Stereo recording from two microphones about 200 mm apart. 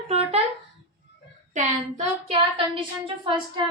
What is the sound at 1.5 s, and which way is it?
Speech, 35° right (ahead or behind).